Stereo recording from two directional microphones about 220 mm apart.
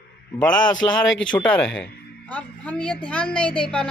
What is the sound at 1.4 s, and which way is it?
A woman's voice, 5° left (ahead or behind).